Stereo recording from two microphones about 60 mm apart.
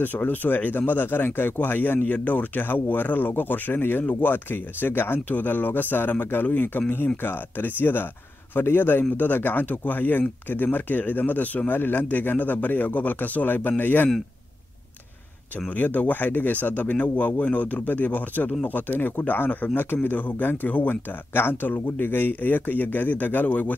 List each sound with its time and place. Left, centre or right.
0.0 s speech: left
15.7 s speech: left